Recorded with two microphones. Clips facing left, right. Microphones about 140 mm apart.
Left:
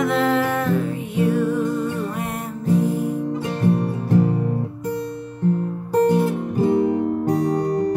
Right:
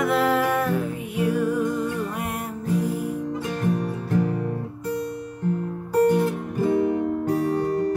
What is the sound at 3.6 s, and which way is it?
Music, 25° left (ahead or behind).